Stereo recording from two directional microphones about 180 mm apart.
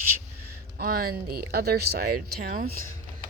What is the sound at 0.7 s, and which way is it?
Speech, 55° right (ahead or behind).